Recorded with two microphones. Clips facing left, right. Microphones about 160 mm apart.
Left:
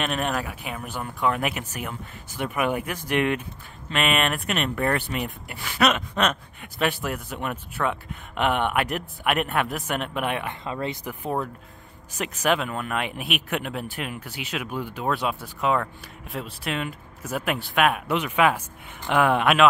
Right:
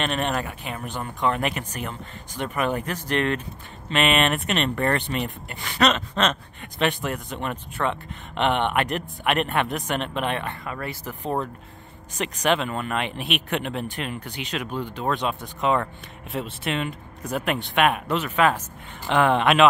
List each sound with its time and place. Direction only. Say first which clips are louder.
0.0 s speech: right 1 dB; 5° left (ahead or behind)
10.6 s speech: left 3 dB; 20° left (ahead or behind)
12.2 s speech: right 1 dB; 5° left (ahead or behind)
18.0 s speech: even; 10° left (ahead or behind)